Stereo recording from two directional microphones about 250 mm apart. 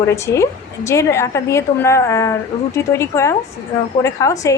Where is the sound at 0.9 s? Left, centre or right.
Centre.